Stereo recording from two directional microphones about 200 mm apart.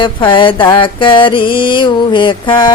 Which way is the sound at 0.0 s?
25° left (ahead or behind).